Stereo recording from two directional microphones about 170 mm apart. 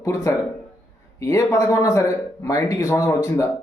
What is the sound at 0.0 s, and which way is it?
A man's voice, 20° left (ahead or behind).